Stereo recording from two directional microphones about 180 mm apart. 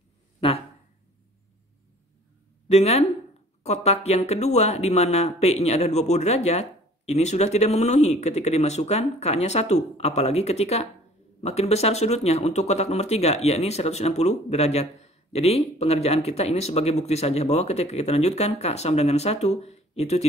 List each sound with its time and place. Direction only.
2.7 s speech: 35° left (ahead or behind)